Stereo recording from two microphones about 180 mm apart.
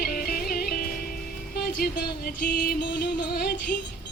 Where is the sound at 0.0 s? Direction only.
55° left (ahead or behind).